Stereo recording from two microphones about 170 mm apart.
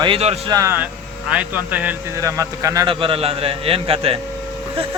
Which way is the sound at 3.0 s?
35° right (ahead or behind).